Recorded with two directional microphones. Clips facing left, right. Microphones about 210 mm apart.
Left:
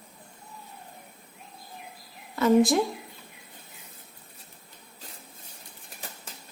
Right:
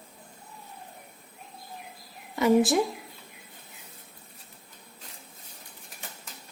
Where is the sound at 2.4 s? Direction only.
10° right (ahead or behind).